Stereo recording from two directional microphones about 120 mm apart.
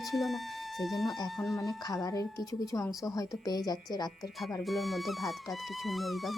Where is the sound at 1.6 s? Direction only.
30° left (ahead or behind).